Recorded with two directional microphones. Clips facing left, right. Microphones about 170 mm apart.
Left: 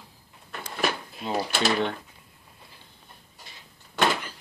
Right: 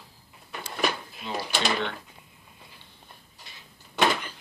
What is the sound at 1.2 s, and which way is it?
Speech, 40° left (ahead or behind).